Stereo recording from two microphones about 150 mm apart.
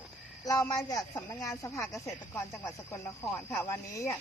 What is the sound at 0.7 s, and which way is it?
Speech, 25° left (ahead or behind).